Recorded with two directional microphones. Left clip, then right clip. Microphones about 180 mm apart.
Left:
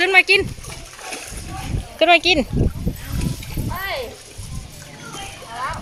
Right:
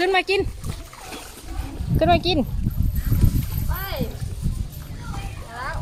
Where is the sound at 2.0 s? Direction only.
10° right (ahead or behind).